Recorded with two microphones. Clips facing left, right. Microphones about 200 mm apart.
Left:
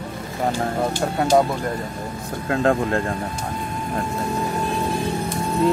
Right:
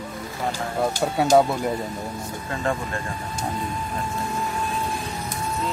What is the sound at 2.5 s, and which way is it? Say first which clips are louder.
Speech: left 8 dB; 65° left (ahead or behind).